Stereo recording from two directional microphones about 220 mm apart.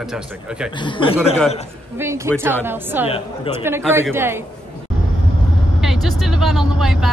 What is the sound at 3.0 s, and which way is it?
Speech, 25° left (ahead or behind).